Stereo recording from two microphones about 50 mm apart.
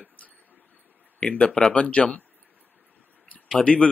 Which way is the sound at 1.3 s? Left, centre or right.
Left.